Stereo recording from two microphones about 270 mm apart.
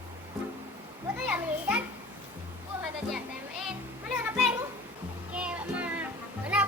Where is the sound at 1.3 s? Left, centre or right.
Centre.